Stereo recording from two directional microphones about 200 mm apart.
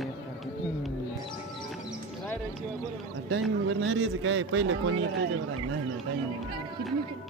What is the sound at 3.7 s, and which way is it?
Speech, 75° right (ahead or behind).